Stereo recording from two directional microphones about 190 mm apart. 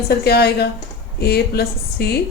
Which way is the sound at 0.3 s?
60° left (ahead or behind).